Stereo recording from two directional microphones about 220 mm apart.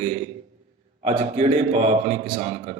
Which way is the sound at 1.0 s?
30° right (ahead or behind).